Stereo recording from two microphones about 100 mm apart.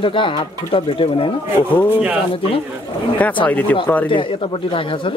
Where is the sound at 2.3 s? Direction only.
65° left (ahead or behind).